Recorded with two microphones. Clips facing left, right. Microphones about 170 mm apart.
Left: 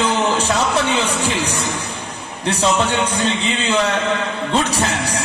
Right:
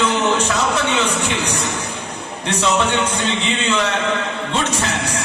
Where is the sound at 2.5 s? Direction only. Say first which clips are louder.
Left 1 dB; 35° left (ahead or behind).